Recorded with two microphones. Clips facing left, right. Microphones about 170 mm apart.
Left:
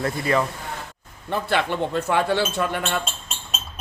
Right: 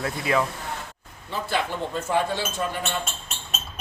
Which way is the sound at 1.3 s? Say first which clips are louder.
Left 4 dB; 65° left (ahead or behind).